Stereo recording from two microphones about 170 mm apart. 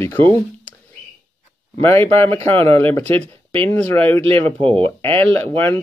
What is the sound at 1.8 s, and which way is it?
Speech, 15° left (ahead or behind).